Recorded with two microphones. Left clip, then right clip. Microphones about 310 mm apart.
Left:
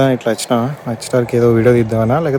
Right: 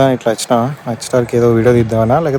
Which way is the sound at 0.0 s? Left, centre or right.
Centre.